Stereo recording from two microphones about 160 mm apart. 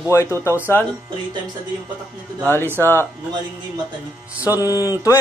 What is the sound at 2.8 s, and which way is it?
Speech, 15° left (ahead or behind).